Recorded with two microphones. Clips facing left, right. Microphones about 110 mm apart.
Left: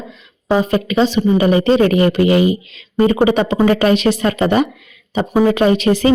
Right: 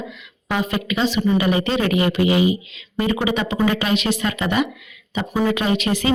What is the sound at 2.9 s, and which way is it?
A woman's voice, 40° left (ahead or behind).